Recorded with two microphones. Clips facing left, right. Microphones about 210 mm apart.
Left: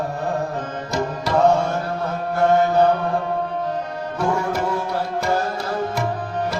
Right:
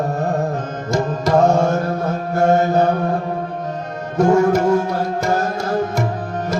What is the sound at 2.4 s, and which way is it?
Mantra, 45° right (ahead or behind).